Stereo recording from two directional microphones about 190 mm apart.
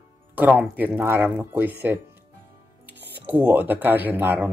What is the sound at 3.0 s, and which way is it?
Music, 60° right (ahead or behind).